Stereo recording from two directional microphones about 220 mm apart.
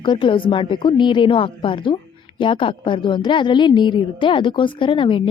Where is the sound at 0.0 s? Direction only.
20° left (ahead or behind).